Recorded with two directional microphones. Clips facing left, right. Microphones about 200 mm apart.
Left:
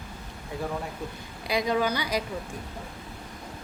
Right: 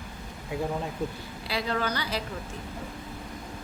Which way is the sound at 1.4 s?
15° left (ahead or behind).